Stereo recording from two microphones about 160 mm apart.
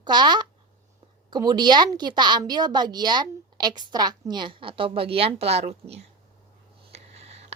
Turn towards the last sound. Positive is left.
turn(degrees=-40)  # may be behind; listen again after turning